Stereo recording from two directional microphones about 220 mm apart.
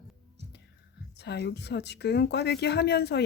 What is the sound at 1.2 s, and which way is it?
A woman's voice, 50° left (ahead or behind).